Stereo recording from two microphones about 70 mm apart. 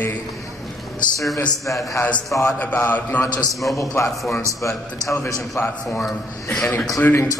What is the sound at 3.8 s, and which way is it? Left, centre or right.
A man's voice, left.